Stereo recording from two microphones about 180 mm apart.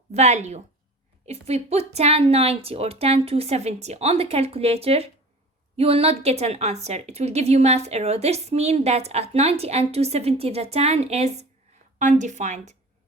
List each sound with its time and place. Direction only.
0.1 s a woman's voice: 40° right (ahead or behind)